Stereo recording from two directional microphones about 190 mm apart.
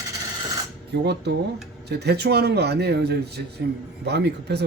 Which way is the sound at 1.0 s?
60° right (ahead or behind).